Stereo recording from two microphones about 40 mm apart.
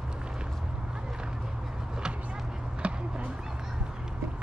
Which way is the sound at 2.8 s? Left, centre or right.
Right.